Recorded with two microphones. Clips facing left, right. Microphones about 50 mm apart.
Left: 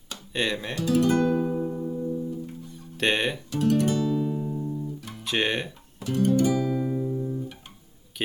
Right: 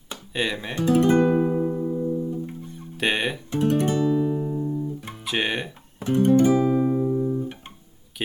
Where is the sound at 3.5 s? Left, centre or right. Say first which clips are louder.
Right 2 dB; right.